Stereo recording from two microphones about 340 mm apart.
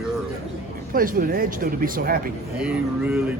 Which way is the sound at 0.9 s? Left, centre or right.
Right.